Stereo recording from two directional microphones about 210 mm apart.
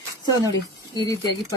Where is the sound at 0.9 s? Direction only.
20° left (ahead or behind).